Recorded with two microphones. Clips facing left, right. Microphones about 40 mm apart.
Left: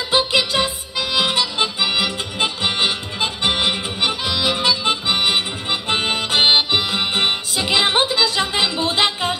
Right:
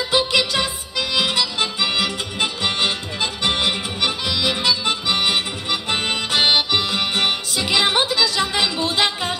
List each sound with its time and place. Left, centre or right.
0.1 s music: left
0.9 s harmonica: centre
1.3 s music: left